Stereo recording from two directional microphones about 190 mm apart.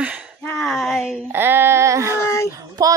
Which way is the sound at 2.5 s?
20° right (ahead or behind).